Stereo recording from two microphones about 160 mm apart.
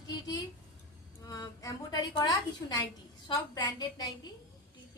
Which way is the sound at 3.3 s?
25° left (ahead or behind).